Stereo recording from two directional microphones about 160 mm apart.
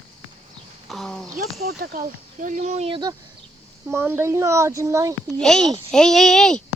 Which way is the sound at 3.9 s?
15° right (ahead or behind).